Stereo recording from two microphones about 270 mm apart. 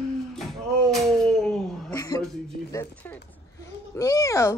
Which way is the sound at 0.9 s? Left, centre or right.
Centre.